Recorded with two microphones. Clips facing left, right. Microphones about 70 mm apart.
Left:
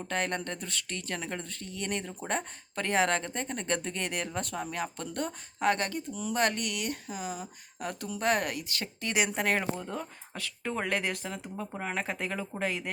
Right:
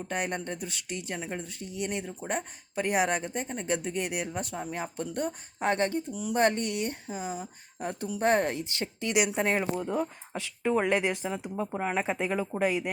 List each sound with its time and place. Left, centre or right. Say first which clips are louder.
0.1 s speech: even; centre
9.0 s a woman's voice: right 3 dB; left
9.7 s speech: right 7 dB; centre